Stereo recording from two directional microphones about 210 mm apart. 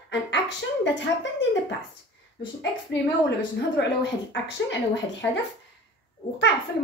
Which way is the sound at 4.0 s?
55° left (ahead or behind).